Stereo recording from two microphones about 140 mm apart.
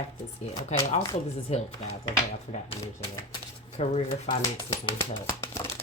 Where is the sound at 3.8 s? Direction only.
45° left (ahead or behind).